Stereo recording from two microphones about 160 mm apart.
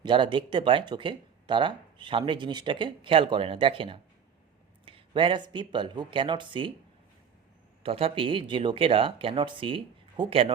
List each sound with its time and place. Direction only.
0.0 s speech: 30° right (ahead or behind)
7.8 s speech: 35° right (ahead or behind)